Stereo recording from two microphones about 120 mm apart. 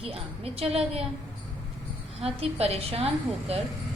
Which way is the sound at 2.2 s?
55° right (ahead or behind).